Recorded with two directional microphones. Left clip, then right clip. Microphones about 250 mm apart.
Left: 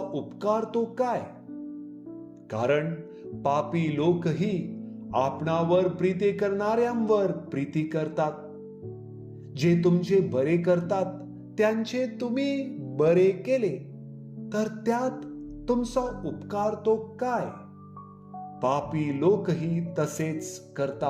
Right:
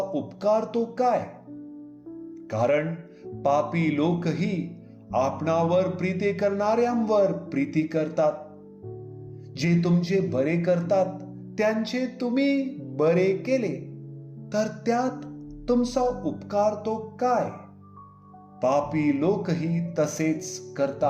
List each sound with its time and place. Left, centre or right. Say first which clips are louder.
0.1 s a man's voice: right 2 dB; left
2.5 s a man's voice: right 2 dB; left
9.6 s a man's voice: left 2 dB; left
18.6 s a man's voice: right 4 dB; left